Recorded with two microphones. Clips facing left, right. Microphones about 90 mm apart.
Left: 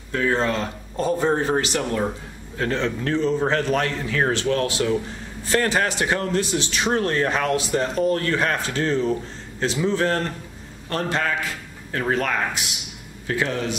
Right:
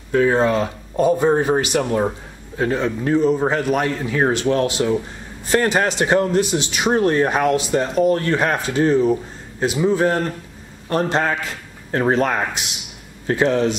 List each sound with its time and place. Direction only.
0.1 s a man's voice: 15° right (ahead or behind)